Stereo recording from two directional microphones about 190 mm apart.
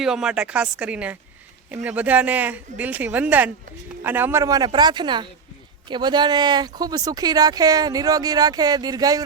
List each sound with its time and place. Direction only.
0.0 s speech: 5° right (ahead or behind); by 9.2 s 20° right (ahead or behind)